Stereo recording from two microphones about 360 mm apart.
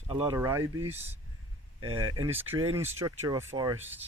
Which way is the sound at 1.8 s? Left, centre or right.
Right.